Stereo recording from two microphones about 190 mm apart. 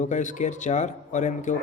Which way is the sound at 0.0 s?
40° left (ahead or behind).